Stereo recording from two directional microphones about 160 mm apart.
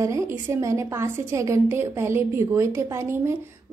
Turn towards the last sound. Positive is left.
turn(degrees=-15)  # may be behind; listen again after turning